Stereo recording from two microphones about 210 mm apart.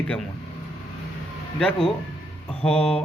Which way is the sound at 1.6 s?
5° left (ahead or behind).